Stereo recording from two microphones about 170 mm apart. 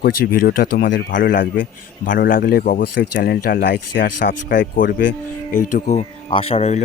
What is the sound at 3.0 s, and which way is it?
Speech, 70° left (ahead or behind).